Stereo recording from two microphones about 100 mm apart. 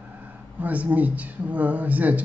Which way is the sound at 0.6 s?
15° right (ahead or behind).